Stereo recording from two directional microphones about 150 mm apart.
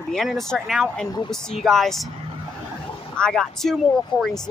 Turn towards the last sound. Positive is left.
turn(degrees=0)  # may be behind; listen again after turning